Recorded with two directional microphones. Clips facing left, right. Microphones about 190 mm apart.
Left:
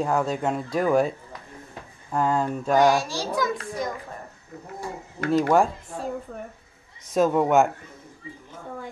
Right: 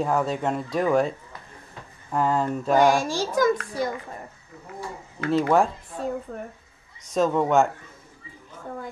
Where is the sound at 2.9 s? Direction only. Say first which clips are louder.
Right 2 dB; 50° right (ahead or behind).